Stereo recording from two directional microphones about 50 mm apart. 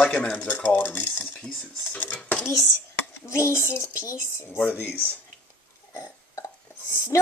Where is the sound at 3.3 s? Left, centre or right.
Left.